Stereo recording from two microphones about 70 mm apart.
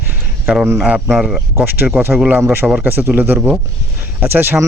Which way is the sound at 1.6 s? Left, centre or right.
Right.